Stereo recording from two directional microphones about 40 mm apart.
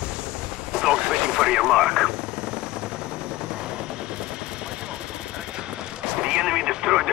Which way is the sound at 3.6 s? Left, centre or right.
Right.